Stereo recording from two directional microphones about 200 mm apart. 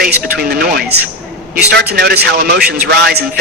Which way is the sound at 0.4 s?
45° right (ahead or behind).